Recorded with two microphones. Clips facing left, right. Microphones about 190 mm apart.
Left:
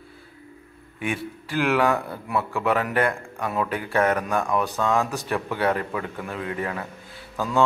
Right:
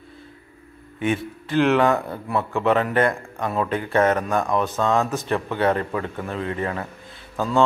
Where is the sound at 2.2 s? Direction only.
25° right (ahead or behind).